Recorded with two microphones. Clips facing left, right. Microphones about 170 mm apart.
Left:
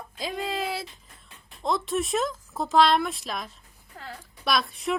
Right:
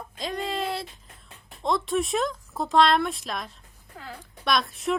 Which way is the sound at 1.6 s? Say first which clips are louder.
Right 1 dB; centre (ahead or behind).